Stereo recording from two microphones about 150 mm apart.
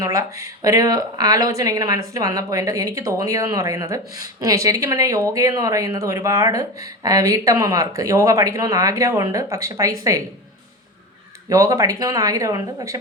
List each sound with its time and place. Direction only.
0.0 s speech: 25° right (ahead or behind)
11.4 s speech: 25° right (ahead or behind)